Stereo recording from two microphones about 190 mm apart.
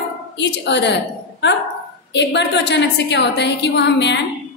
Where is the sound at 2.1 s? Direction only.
65° left (ahead or behind).